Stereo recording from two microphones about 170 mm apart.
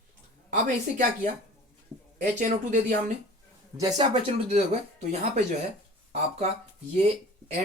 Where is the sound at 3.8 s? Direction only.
25° right (ahead or behind).